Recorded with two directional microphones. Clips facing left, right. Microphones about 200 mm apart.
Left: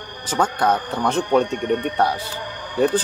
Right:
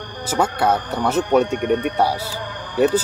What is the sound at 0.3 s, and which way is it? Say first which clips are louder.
Speech: right 1 dB; 10° right (ahead or behind).